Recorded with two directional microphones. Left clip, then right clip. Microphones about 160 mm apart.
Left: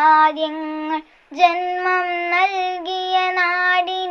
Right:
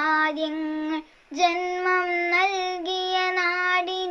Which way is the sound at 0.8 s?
25° right (ahead or behind).